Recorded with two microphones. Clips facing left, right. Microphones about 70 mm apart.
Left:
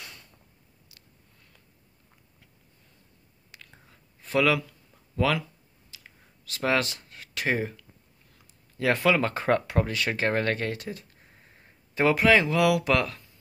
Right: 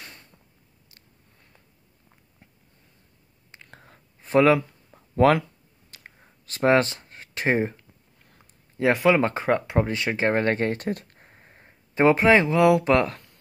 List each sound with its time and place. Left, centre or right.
3.5 s whispering: right
3.9 s a sound: right
8.7 s speech: right
10.8 s speech: right
11.2 s speech: right
13.1 s a sound: right